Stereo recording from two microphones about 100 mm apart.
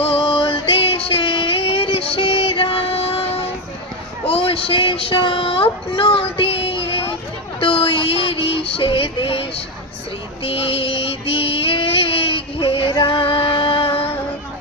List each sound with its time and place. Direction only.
0.0 s music: 70° left (ahead or behind)
4.3 s speech: 65° left (ahead or behind)
5.9 s a sound: 65° left (ahead or behind)
7.6 s music: 60° left (ahead or behind)
10.4 s child singing: 65° left (ahead or behind)